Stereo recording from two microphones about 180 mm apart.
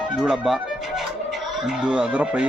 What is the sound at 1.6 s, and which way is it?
Speech, 5° right (ahead or behind).